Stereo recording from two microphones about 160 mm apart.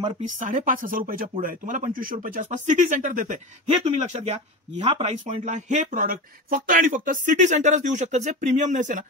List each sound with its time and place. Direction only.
0.2 s speech: 55° right (ahead or behind)
3.8 s speech: 45° right (ahead or behind)
5.2 s speech: 50° right (ahead or behind)